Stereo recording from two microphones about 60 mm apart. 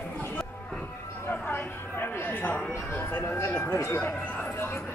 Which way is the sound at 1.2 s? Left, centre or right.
Left.